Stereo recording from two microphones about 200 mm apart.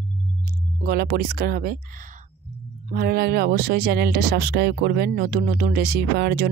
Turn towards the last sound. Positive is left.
turn(degrees=-55)  # may be behind; listen again after turning